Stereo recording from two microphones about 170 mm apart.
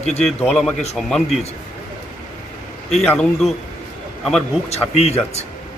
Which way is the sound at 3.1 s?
5° left (ahead or behind).